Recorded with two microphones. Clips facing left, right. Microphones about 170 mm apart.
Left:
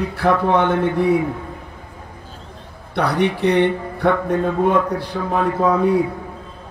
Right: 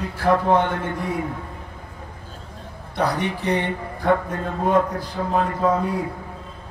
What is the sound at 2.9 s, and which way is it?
Speech, 70° left (ahead or behind).